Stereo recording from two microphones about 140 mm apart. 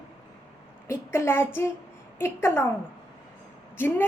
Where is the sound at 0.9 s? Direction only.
20° left (ahead or behind).